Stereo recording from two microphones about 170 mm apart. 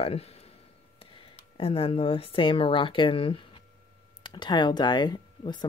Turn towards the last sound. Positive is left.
turn(degrees=25)  # may be behind; listen again after turning